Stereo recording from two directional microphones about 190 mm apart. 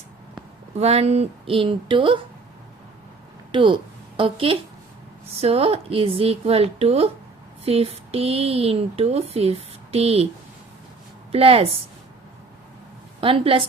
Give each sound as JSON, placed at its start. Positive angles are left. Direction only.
{"t": 0.8, "sound": "a woman's voice", "side_deg": -35}
{"t": 3.5, "sound": "a woman's voice", "side_deg": -25}
{"t": 11.3, "sound": "a woman's voice", "side_deg": -30}
{"t": 13.2, "sound": "a woman's voice", "side_deg": -30}